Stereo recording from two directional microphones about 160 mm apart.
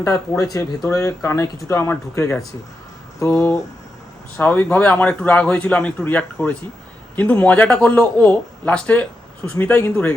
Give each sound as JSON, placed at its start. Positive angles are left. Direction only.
{"t": 0.0, "sound": "a man's voice", "side_deg": 20}